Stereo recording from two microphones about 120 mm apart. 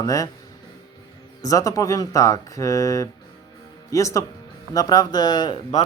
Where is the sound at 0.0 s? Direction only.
25° left (ahead or behind).